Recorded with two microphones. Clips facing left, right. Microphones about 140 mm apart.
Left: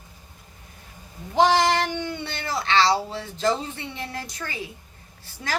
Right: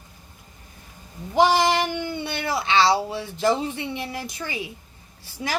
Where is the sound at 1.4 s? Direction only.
10° right (ahead or behind).